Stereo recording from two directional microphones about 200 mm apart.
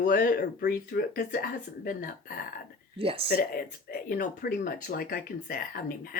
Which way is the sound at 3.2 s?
50° left (ahead or behind).